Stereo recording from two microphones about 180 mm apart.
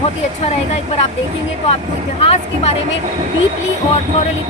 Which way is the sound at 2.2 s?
35° left (ahead or behind).